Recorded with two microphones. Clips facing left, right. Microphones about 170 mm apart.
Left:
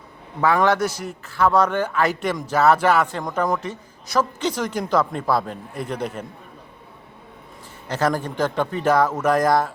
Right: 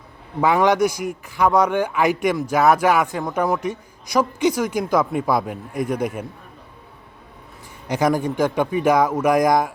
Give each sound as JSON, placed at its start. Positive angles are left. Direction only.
{"t": 0.4, "sound": "a man's voice", "side_deg": -15}
{"t": 7.9, "sound": "a man's voice", "side_deg": -15}